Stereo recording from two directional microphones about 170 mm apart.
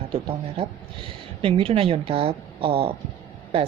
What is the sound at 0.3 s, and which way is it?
Speech, 35° right (ahead or behind).